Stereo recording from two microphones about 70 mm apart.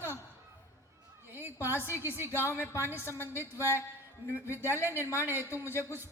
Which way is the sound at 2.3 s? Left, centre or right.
Left.